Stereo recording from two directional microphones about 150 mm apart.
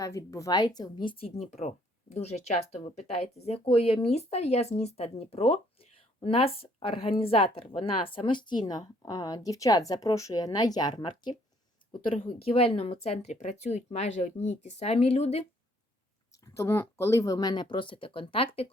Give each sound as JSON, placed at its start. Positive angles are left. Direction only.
{"t": 0.0, "sound": "a woman's voice", "side_deg": 20}
{"t": 16.6, "sound": "speech", "side_deg": 15}